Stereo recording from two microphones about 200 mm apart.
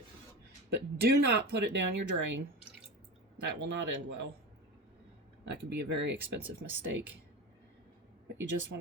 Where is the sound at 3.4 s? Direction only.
65° right (ahead or behind).